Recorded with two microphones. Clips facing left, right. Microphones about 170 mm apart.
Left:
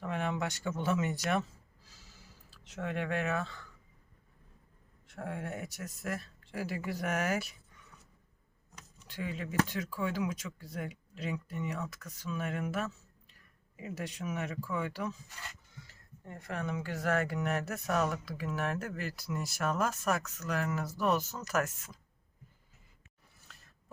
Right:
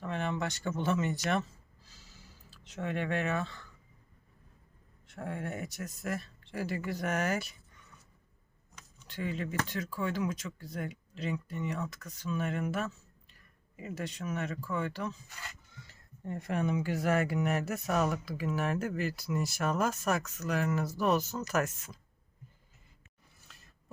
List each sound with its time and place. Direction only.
0.0 s a man's voice: 10° left (ahead or behind)
5.1 s speech: centre (ahead or behind)
9.0 s speech: 5° left (ahead or behind)
15.9 s speech: 25° right (ahead or behind); by 21.9 s centre (ahead or behind)